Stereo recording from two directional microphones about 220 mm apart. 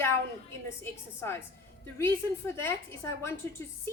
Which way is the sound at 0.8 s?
10° left (ahead or behind).